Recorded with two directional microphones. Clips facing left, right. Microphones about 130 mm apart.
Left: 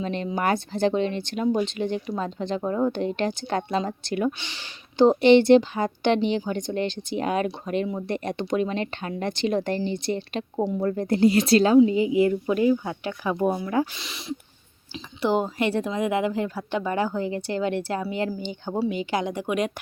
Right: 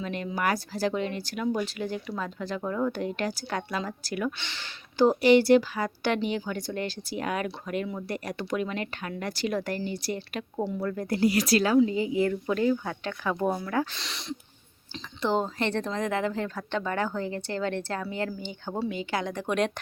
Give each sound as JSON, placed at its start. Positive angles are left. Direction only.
{"t": 0.0, "sound": "a woman's voice", "side_deg": 30}
{"t": 4.4, "sound": "a woman's voice", "side_deg": 15}
{"t": 14.0, "sound": "speech", "side_deg": 0}
{"t": 14.9, "sound": "speech", "side_deg": 10}